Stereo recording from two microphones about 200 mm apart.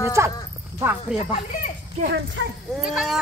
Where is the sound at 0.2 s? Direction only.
15° right (ahead or behind).